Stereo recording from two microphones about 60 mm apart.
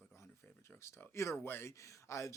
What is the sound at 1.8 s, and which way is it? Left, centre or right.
Speech, left.